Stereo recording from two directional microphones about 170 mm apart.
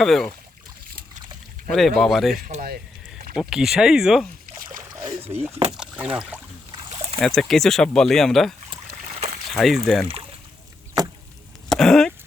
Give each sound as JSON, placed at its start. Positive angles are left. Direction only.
{"t": 0.0, "sound": "speech", "side_deg": 0}
{"t": 2.0, "sound": "speech", "side_deg": 0}
{"t": 5.0, "sound": "a sound", "side_deg": -15}
{"t": 5.7, "sound": "speech", "side_deg": -5}
{"t": 6.9, "sound": "a sound", "side_deg": -30}
{"t": 7.2, "sound": "speech", "side_deg": 0}
{"t": 9.6, "sound": "speech", "side_deg": 0}
{"t": 11.7, "sound": "cough", "side_deg": 0}